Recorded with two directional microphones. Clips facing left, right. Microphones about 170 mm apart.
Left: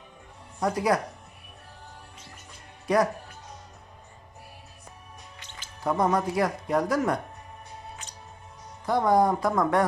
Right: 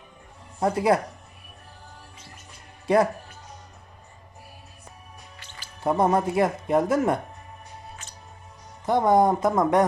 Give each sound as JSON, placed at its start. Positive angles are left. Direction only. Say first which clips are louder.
{"t": 0.6, "sound": "speech", "louder": "right 3 dB", "side_deg": -25}
{"t": 2.8, "sound": "speech", "louder": "right 3 dB", "side_deg": -25}
{"t": 5.4, "sound": "music", "louder": "even", "side_deg": 20}
{"t": 5.8, "sound": "speech", "louder": "right 3 dB", "side_deg": -25}
{"t": 8.0, "sound": "music", "louder": "left 1 dB", "side_deg": 15}
{"t": 8.9, "sound": "speech", "louder": "right 3 dB", "side_deg": -20}